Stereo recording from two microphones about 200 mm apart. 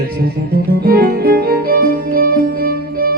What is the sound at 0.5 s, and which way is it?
Music, 50° right (ahead or behind).